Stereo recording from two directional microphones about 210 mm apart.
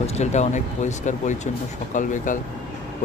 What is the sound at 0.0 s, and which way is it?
Speech, 30° left (ahead or behind).